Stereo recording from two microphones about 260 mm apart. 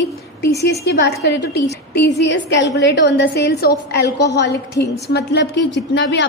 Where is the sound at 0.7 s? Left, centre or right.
Left.